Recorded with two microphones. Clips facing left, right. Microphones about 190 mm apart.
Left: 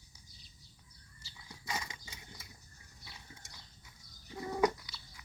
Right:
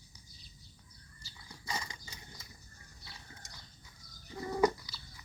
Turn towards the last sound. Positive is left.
turn(degrees=0)  # may be behind; listen again after turning